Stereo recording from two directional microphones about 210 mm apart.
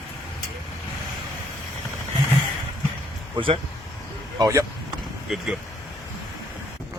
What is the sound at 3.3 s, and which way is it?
Speech, 25° right (ahead or behind).